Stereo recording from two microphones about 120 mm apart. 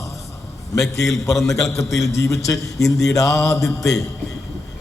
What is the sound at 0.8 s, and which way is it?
Speech, centre (ahead or behind).